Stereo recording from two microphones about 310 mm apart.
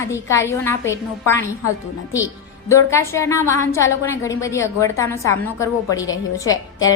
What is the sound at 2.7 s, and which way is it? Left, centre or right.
A woman's voice, centre.